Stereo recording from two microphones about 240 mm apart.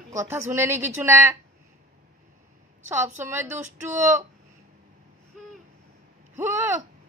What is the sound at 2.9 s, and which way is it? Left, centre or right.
Speech, centre.